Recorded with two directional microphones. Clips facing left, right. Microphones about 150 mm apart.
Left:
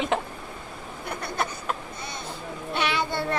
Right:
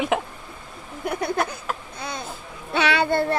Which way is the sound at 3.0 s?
55° right (ahead or behind).